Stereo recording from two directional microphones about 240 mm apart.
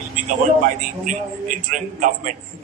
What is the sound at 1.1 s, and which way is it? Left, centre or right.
A man's voice, right.